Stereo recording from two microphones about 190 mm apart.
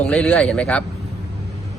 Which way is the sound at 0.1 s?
5° left (ahead or behind).